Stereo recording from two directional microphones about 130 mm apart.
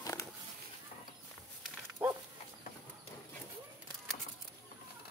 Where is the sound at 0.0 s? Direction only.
25° left (ahead or behind).